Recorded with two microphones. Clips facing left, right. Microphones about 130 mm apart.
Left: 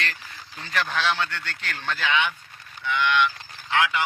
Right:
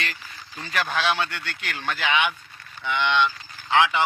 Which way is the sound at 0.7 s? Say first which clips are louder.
Right 1 dB; 10° right (ahead or behind).